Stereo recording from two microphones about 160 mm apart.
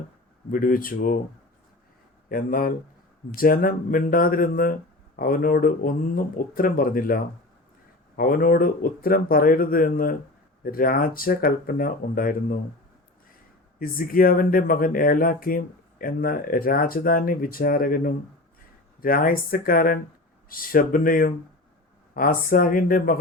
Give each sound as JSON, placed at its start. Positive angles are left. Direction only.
{"t": 0.5, "sound": "speech", "side_deg": 60}
{"t": 2.3, "sound": "speech", "side_deg": 60}
{"t": 13.7, "sound": "speech", "side_deg": 65}